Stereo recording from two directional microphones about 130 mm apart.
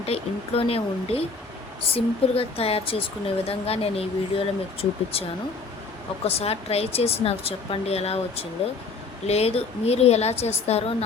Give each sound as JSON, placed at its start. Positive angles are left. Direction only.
{"t": 0.0, "sound": "speech", "side_deg": 50}
{"t": 6.2, "sound": "a woman's voice", "side_deg": 50}